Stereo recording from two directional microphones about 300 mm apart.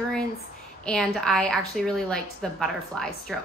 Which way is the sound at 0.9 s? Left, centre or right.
Centre.